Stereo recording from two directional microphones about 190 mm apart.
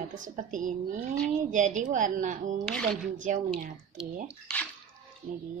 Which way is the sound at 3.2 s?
40° right (ahead or behind).